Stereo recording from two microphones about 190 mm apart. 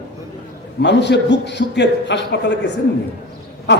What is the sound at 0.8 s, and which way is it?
A man's voice, 65° left (ahead or behind).